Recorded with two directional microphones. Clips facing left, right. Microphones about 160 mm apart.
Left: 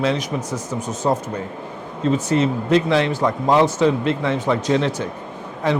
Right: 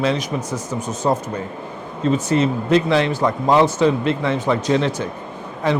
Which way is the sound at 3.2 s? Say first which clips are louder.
Right 1 dB; 25° right (ahead or behind).